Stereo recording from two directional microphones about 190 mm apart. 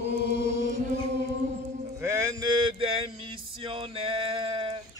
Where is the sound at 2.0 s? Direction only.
15° right (ahead or behind).